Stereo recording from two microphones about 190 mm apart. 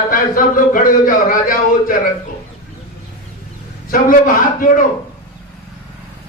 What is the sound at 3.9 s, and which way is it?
Speech, 45° left (ahead or behind).